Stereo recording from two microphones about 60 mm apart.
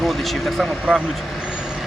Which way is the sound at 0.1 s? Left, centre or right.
Centre.